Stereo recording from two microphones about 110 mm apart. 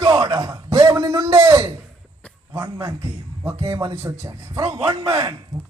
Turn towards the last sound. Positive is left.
turn(degrees=-25)  # may be behind; listen again after turning